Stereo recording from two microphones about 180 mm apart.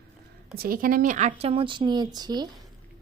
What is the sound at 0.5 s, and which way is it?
Speech, 55° right (ahead or behind).